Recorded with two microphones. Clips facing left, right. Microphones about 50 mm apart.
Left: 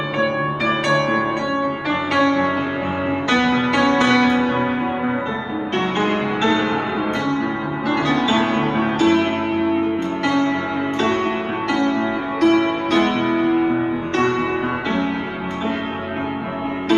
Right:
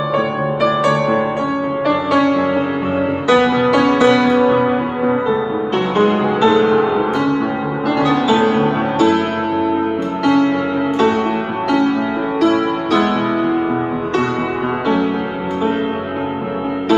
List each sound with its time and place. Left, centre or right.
0.8 s music: left
5.9 s music: left
8.0 s music: left
12.4 s music: left